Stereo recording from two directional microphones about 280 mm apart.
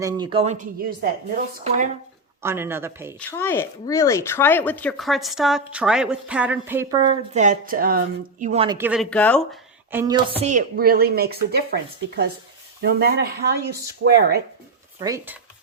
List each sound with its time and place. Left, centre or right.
0.0 s speech: centre
2.4 s speech: centre
3.2 s speech: centre
8.9 s speech: centre
9.9 s speech: centre
10.4 s speech: right
14.9 s speech: centre